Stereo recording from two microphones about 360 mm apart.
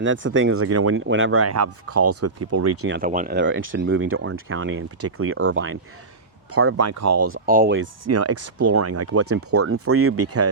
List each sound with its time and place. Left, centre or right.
0.0 s speech: right
2.9 s speech: right
7.8 s speech: right